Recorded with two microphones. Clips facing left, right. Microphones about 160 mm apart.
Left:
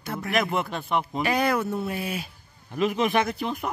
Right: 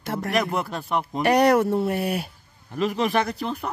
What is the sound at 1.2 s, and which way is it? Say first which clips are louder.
Speech: right 9 dB; 70° right (ahead or behind).